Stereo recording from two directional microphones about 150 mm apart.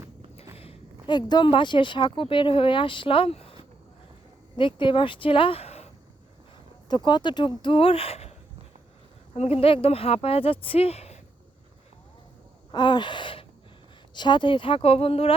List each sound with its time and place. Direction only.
0.5 s speech: 40° left (ahead or behind)
6.8 s speech: 30° left (ahead or behind)
9.3 s speech: 45° left (ahead or behind)
12.7 s speech: 30° left (ahead or behind)